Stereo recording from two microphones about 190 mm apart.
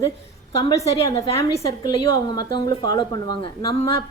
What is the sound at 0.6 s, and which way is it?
A woman's voice, 20° left (ahead or behind).